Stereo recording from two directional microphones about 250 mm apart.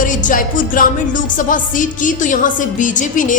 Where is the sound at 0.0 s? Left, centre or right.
Left.